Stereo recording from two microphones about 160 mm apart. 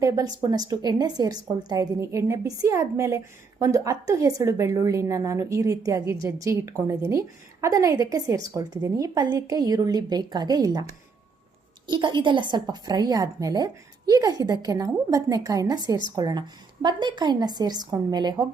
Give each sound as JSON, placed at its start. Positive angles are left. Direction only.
{"t": 0.0, "sound": "a woman's voice", "side_deg": -20}
{"t": 11.9, "sound": "a woman's voice", "side_deg": -30}